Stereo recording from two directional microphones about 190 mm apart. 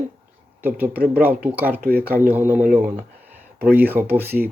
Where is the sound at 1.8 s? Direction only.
55° right (ahead or behind).